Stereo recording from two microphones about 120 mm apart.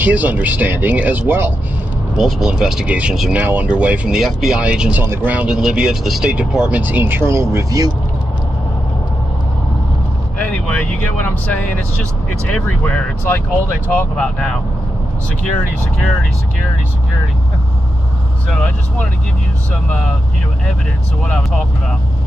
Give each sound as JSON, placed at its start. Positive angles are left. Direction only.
{"t": 0.0, "sound": "speech", "side_deg": -15}
{"t": 2.1, "sound": "speech", "side_deg": 0}
{"t": 10.4, "sound": "speech", "side_deg": 15}
{"t": 21.2, "sound": "speech", "side_deg": 5}